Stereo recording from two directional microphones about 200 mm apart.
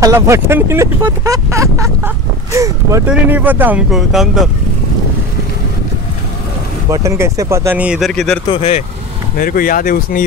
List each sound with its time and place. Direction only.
0.0 s speech: 15° right (ahead or behind)
6.9 s speech: 15° right (ahead or behind); by 8.4 s 5° left (ahead or behind)
8.5 s speech: 30° left (ahead or behind)
9.4 s speech: 45° left (ahead or behind)